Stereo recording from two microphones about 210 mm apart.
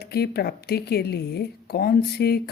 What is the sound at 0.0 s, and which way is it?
Speech, 50° left (ahead or behind).